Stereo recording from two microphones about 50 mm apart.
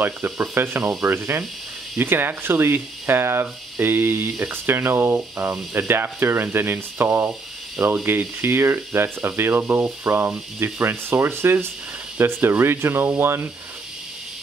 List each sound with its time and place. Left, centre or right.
0.6 s speech: right
3.8 s a sound: right
4.6 s speech: right